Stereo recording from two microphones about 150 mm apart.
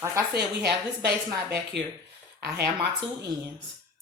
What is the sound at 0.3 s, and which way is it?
Speech, 90° right.